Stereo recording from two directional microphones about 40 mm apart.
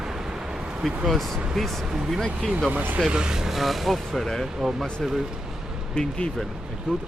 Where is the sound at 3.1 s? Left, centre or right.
Centre.